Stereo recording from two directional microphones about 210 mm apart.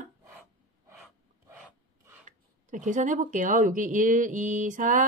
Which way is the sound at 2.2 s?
35° right (ahead or behind).